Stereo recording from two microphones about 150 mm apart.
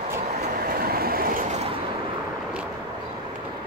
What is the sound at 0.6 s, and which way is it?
Train, 80° right.